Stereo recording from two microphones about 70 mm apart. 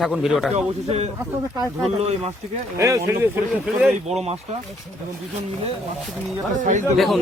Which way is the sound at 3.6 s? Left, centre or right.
Centre.